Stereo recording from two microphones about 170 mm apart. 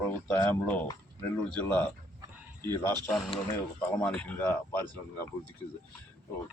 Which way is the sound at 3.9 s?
10° left (ahead or behind).